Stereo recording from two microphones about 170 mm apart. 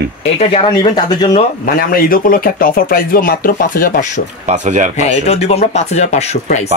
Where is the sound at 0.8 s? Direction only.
25° left (ahead or behind).